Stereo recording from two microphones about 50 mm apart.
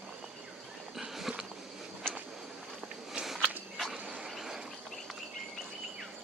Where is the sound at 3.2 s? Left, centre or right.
Centre.